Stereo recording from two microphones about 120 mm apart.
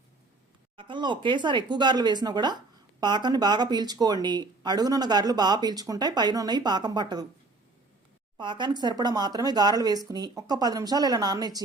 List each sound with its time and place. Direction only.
0.8 s speech: 40° right (ahead or behind)
8.4 s speech: 40° right (ahead or behind)